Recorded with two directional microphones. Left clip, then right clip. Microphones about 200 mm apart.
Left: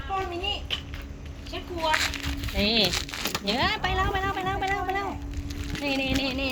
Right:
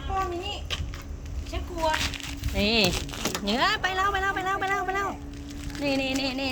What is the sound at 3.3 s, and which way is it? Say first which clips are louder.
A woman's voice: right 1 dB; 5° right (ahead or behind).